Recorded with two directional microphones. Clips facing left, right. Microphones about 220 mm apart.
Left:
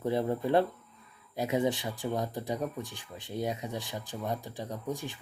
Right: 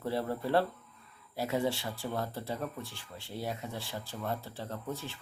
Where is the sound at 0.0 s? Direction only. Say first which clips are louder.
Left 4 dB; 20° left (ahead or behind).